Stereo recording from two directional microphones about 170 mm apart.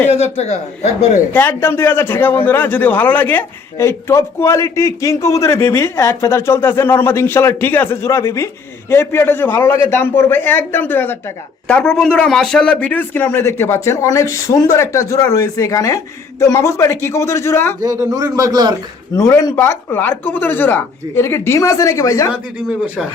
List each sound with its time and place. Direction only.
0.1 s speech: 40° left (ahead or behind)
1.3 s a man's voice: 10° left (ahead or behind)
17.8 s a man's voice: 20° right (ahead or behind)
19.1 s a man's voice: 15° left (ahead or behind)
22.3 s speech: 5° right (ahead or behind)